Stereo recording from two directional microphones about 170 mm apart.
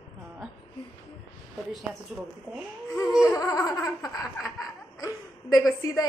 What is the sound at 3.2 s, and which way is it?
A woman's voice, 20° left (ahead or behind).